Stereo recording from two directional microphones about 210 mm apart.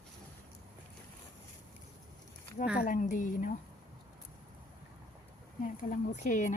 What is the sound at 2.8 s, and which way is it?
Speech, 40° left (ahead or behind).